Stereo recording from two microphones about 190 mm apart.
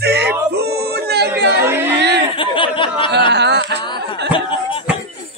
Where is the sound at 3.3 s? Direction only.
65° right (ahead or behind).